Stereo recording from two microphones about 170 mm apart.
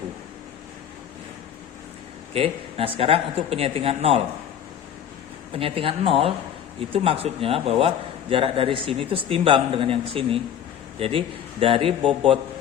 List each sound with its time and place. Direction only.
2.3 s a man's voice: 35° right (ahead or behind)
5.5 s a man's voice: 35° right (ahead or behind)
11.6 s a man's voice: 30° right (ahead or behind)